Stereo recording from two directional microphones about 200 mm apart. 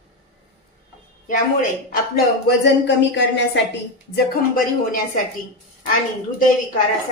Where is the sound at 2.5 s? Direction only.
60° left (ahead or behind).